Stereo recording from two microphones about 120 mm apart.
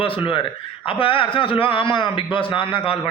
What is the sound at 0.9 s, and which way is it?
A man's voice, 45° left (ahead or behind).